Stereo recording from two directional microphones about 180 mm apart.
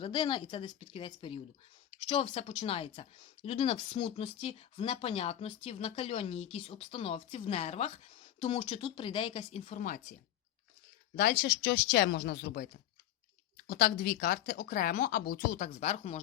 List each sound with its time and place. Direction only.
0.0 s a woman's voice: 30° left (ahead or behind); by 10.0 s 45° left (ahead or behind)
11.2 s speech: 55° left (ahead or behind)
13.7 s speech: 55° left (ahead or behind); by 16.2 s 40° left (ahead or behind)